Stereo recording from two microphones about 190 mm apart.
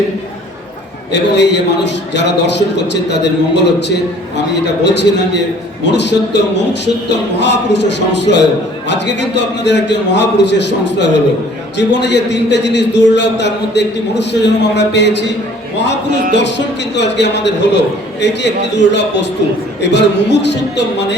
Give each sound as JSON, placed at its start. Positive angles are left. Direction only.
{"t": 1.1, "sound": "a man's voice", "side_deg": 65}
{"t": 16.3, "sound": "a man's voice", "side_deg": 65}